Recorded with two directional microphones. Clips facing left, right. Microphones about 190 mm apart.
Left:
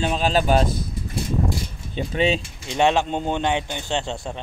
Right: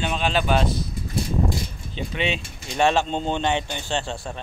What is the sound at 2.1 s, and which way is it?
Speech, 35° left (ahead or behind).